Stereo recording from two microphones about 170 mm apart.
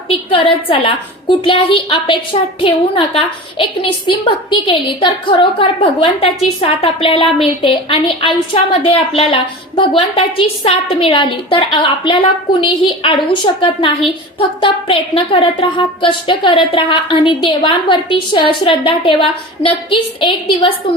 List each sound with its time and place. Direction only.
0.1 s a woman's voice: 30° left (ahead or behind)